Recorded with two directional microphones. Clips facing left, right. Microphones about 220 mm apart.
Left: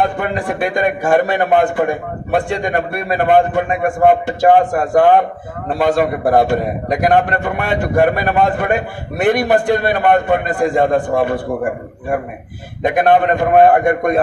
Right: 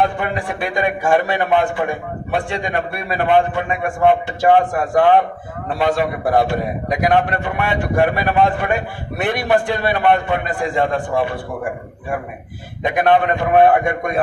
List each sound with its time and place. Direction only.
0.0 s a man's voice: 45° left (ahead or behind)
12.8 s a man's voice: 45° left (ahead or behind)